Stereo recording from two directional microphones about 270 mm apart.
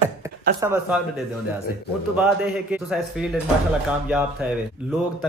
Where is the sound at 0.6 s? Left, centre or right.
Centre.